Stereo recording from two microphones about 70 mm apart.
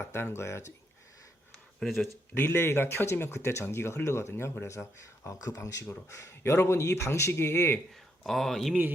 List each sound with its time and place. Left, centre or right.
0.0 s speech: left
1.5 s a sound: centre
2.3 s speech: left
6.1 s speech: left
8.2 s speech: centre